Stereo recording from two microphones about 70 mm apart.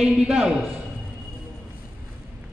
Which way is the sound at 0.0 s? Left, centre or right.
Centre.